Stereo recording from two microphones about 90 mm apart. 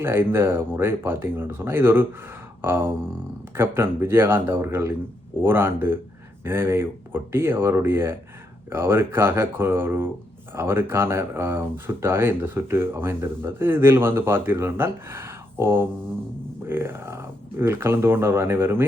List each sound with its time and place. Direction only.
0.0 s speech: 25° right (ahead or behind)